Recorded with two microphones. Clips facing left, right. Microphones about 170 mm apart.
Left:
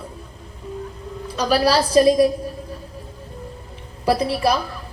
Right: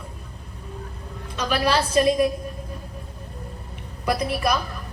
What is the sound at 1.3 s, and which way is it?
A woman's voice, 35° left (ahead or behind).